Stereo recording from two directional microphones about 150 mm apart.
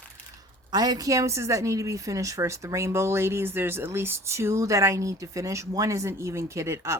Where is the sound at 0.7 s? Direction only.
25° right (ahead or behind).